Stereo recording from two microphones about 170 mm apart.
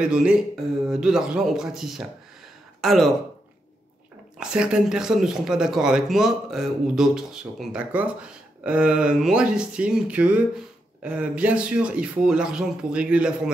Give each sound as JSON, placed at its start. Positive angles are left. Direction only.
{"t": 0.0, "sound": "speech", "side_deg": -5}
{"t": 4.4, "sound": "speech", "side_deg": -5}